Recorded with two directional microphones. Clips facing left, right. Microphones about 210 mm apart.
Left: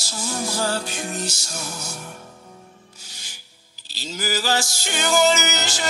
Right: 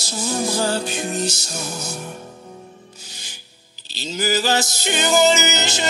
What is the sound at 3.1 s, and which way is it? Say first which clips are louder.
Rub: right 4 dB; 20° right (ahead or behind).